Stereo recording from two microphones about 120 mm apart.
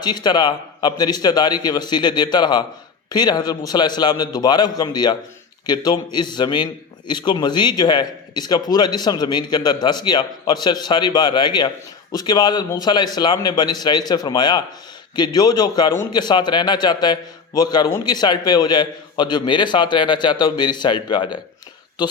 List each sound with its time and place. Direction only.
0.0 s a man's voice: 35° left (ahead or behind)